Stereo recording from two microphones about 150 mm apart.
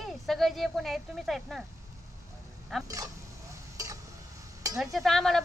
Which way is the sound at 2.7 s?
Centre (ahead or behind).